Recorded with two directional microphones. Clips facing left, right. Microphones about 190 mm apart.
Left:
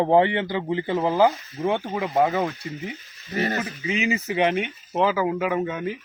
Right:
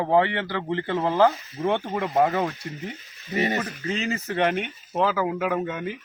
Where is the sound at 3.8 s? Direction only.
15° left (ahead or behind).